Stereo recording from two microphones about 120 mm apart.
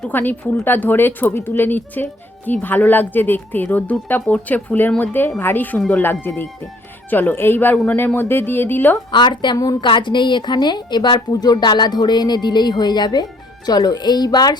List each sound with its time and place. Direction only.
0.0 s speech: 15° left (ahead or behind)
9.1 s a woman's voice: 40° left (ahead or behind)